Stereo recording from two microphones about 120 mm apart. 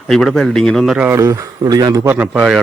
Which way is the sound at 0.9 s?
20° right (ahead or behind).